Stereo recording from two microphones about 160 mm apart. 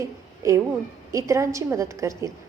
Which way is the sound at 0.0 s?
20° right (ahead or behind).